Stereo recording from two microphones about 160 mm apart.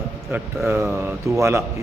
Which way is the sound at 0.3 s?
10° right (ahead or behind).